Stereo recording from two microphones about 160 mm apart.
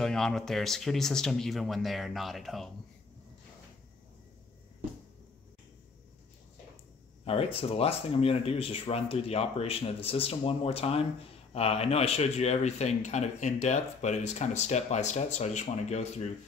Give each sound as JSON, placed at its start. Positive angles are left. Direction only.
{"t": 0.0, "sound": "speech", "side_deg": 5}
{"t": 7.2, "sound": "speech", "side_deg": 35}